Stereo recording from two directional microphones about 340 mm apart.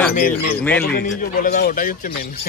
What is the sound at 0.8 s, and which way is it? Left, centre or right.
Speech, left.